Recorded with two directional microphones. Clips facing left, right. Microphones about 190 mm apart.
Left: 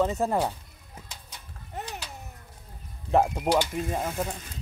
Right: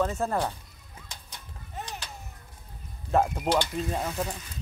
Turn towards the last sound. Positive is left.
turn(degrees=10)  # may be behind; listen again after turning